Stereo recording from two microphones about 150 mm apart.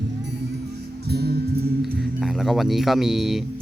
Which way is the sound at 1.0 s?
90° right.